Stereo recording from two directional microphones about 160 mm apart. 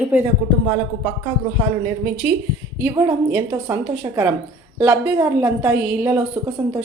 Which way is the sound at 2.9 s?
20° right (ahead or behind).